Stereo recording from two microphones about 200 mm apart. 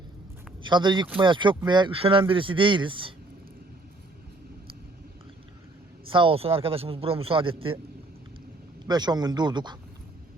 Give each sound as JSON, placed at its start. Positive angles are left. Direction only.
{"t": 0.7, "sound": "speech", "side_deg": -20}
{"t": 6.1, "sound": "speech", "side_deg": -25}
{"t": 8.9, "sound": "speech", "side_deg": -20}